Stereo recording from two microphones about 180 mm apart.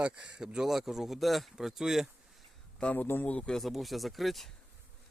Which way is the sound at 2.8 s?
10° left (ahead or behind).